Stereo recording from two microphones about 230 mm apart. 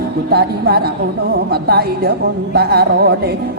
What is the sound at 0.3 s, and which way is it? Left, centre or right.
Speech, right.